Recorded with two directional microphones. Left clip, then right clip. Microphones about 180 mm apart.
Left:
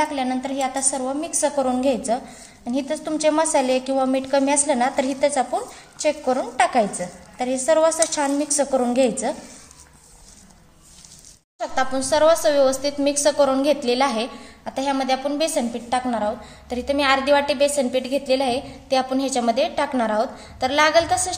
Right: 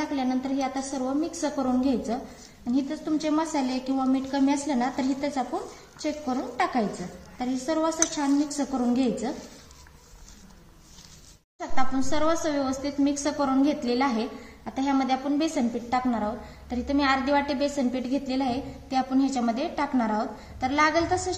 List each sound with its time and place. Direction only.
0.0 s a woman's voice: 50° left (ahead or behind)
11.6 s a woman's voice: 45° left (ahead or behind)